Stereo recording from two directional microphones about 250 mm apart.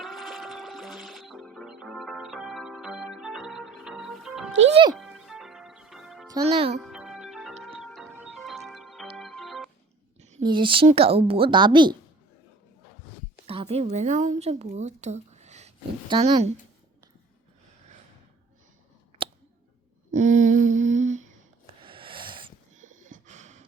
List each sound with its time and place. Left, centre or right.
0.0 s music: centre
6.2 s a child's voice: centre
6.7 s music: centre
8.4 s organ: centre
10.2 s a woman's voice: right
13.5 s speech: right
20.1 s humming: right
21.8 s a sound: centre